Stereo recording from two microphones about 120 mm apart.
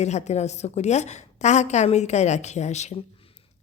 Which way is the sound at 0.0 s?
70° left (ahead or behind).